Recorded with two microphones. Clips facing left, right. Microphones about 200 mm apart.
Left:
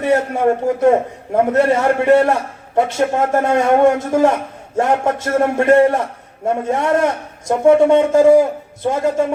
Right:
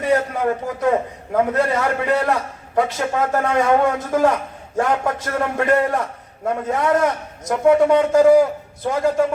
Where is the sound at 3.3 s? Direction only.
25° left (ahead or behind).